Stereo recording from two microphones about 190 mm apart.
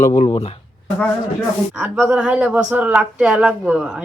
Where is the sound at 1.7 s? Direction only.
5° right (ahead or behind).